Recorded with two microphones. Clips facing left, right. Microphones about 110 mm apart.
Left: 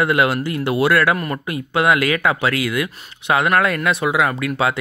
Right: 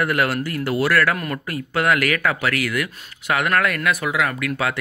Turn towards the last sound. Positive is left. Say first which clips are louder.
# left 4 dB
turn(degrees=25)  # may be behind; listen again after turning